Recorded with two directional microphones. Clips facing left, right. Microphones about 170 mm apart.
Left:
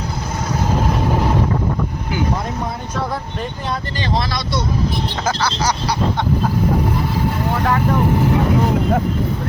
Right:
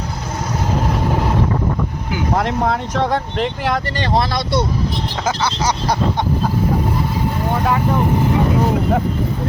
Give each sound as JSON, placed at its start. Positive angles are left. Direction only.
{"t": 2.4, "sound": "speech", "side_deg": -90}
{"t": 4.0, "sound": "speech", "side_deg": -55}
{"t": 5.2, "sound": "speech", "side_deg": -20}